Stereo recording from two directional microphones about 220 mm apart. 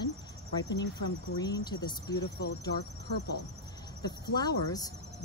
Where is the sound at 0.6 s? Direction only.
55° left (ahead or behind).